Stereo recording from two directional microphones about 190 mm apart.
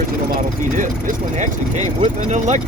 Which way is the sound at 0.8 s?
40° right (ahead or behind).